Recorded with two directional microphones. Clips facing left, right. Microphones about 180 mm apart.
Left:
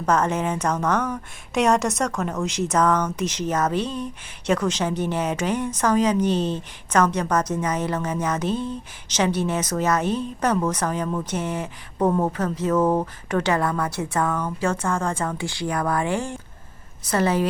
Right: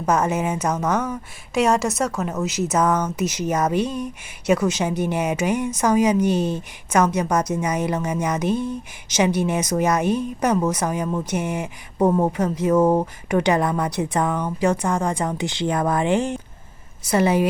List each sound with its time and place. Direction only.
0.0 s a woman's voice: 10° right (ahead or behind)